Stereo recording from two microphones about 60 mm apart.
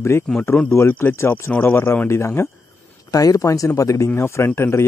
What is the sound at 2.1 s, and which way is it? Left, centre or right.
Speech, left.